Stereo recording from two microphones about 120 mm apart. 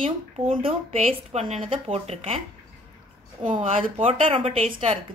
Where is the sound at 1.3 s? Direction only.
65° right (ahead or behind).